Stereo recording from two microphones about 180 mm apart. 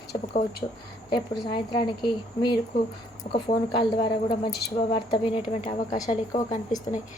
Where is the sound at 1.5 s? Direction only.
25° left (ahead or behind).